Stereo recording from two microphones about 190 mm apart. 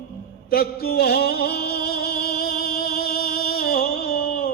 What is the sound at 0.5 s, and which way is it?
Chant, 55° left (ahead or behind).